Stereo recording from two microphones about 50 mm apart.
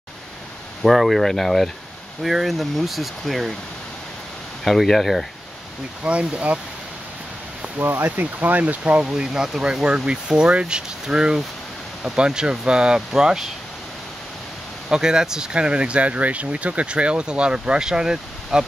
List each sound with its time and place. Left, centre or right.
0.8 s speech: centre
4.6 s speech: centre
6.0 s speech: right
7.8 s speech: right
9.0 s speech: centre
14.9 s speech: centre